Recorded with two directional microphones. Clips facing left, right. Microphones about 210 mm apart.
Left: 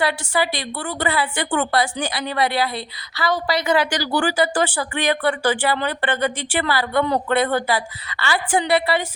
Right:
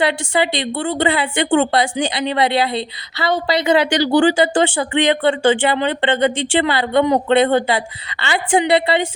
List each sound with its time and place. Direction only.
0.0 s a woman's voice: 25° right (ahead or behind)